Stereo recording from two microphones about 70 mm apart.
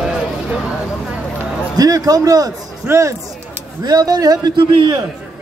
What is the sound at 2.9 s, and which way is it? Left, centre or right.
Speech, right.